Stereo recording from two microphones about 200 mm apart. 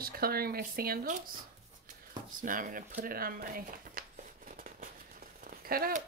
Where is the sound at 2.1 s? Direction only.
40° right (ahead or behind).